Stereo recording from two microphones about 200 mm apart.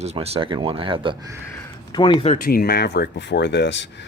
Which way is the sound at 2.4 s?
50° left (ahead or behind).